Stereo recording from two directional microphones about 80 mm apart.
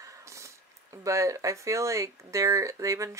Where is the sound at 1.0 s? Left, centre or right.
Right.